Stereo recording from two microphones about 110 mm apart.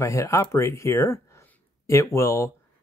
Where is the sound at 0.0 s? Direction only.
25° left (ahead or behind).